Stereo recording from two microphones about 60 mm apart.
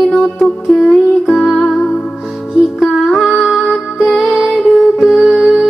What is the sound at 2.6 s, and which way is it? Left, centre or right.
Music, centre.